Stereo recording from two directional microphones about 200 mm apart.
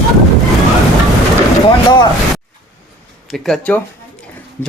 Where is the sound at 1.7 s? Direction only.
20° left (ahead or behind).